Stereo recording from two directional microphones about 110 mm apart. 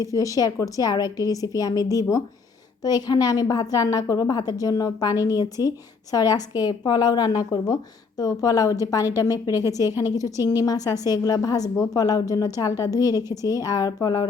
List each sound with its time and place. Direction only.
0.0 s a woman's voice: 30° left (ahead or behind)